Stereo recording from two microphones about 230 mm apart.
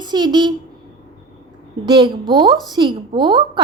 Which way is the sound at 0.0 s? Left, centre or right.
Centre.